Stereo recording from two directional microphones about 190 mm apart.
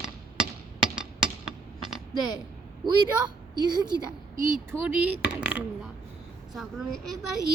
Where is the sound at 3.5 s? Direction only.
20° right (ahead or behind).